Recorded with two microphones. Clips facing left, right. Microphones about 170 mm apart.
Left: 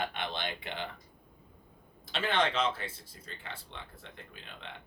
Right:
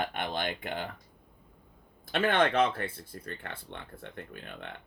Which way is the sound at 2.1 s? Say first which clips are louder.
Right 4 dB; 55° right (ahead or behind).